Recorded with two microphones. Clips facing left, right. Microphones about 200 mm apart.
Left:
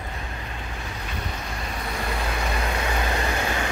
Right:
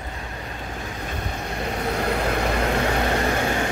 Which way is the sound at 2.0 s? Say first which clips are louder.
Right 5 dB; 60° right (ahead or behind).